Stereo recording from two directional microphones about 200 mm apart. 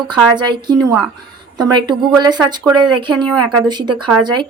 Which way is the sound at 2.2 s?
20° right (ahead or behind).